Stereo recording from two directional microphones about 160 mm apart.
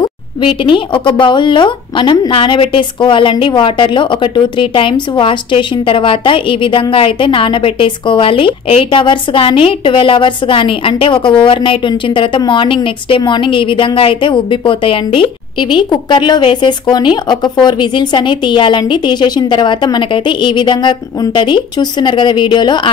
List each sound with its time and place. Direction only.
0.0 s a woman's voice: 30° left (ahead or behind)